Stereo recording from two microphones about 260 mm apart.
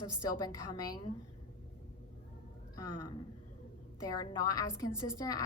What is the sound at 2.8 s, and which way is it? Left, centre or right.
Speech, left.